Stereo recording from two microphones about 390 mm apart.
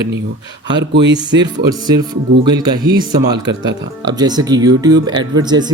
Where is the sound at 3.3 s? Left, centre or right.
Right.